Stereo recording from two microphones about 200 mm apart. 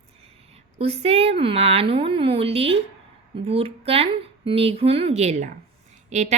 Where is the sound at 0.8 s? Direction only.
30° right (ahead or behind).